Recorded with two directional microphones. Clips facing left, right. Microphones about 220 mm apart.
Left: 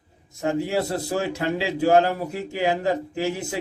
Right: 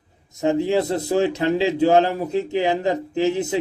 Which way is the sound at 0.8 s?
20° right (ahead or behind).